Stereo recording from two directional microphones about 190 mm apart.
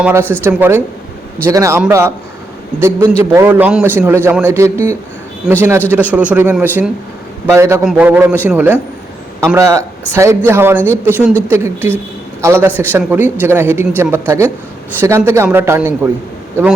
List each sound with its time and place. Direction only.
0.0 s a man's voice: 10° right (ahead or behind)
5.5 s a man's voice: 5° right (ahead or behind)